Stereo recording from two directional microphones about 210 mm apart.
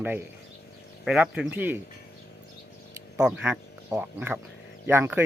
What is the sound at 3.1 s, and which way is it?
Speech, 5° right (ahead or behind).